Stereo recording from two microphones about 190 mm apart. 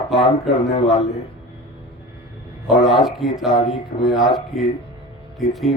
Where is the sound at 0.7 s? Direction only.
30° left (ahead or behind).